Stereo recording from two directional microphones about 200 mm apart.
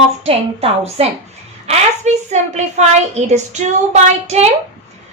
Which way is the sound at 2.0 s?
35° right (ahead or behind).